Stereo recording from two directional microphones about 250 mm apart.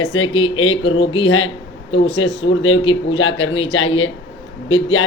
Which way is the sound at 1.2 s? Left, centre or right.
Left.